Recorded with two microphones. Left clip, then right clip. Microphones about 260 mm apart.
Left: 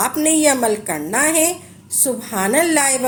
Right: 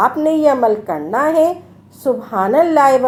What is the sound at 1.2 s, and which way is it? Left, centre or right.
A woman's voice, left.